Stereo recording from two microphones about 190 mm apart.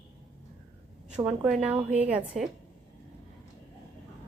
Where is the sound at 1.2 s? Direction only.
5° right (ahead or behind).